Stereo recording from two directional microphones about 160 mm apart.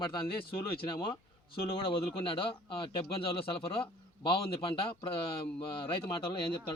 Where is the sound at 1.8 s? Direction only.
35° left (ahead or behind).